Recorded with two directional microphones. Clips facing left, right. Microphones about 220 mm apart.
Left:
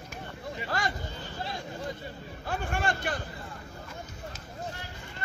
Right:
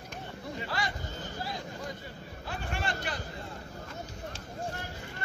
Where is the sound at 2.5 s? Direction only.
50° left (ahead or behind).